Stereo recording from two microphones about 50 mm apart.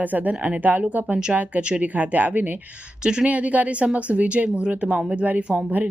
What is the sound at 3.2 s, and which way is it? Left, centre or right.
A woman's voice, right.